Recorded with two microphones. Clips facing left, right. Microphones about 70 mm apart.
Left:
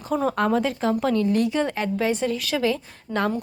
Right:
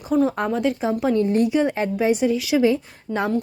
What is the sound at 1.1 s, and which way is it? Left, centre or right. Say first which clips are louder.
A woman's voice: right 3 dB; right.